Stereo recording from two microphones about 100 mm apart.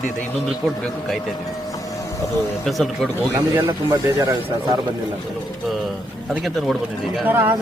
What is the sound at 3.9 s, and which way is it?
Speech, 35° right (ahead or behind).